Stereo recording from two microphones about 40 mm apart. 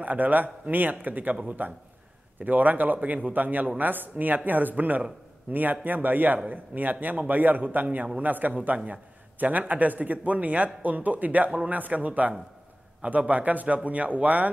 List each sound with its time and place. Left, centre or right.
0.0 s a man's voice: right
2.4 s a man's voice: right